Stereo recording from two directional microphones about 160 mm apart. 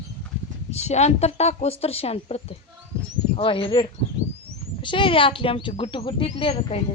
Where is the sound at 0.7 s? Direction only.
45° left (ahead or behind).